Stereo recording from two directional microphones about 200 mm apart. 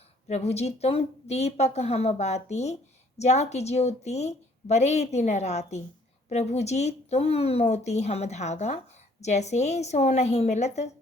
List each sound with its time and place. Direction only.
0.3 s a woman's voice: 35° left (ahead or behind)